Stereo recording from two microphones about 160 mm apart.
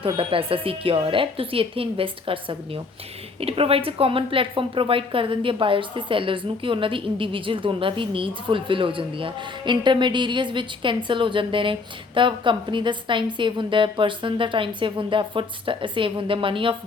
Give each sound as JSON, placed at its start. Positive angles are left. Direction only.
{"t": 0.0, "sound": "speech", "side_deg": -35}